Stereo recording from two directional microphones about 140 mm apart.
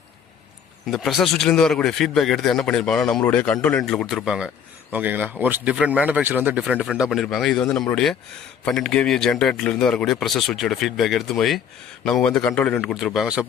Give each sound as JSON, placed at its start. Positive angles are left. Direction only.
{"t": 0.9, "sound": "a man's voice", "side_deg": 0}